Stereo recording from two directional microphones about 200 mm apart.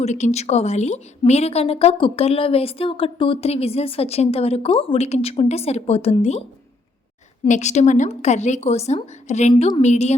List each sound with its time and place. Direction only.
0.0 s a woman's voice: 35° left (ahead or behind)
7.4 s a woman's voice: 35° left (ahead or behind)